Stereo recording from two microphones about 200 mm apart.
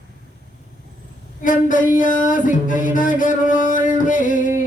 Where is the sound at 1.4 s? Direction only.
40° left (ahead or behind).